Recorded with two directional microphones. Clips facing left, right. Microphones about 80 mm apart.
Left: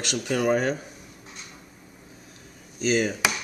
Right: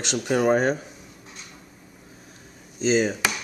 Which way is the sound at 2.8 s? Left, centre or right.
Right.